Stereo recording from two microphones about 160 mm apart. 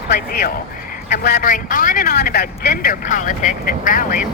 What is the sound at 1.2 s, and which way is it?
Speech, 70° left (ahead or behind).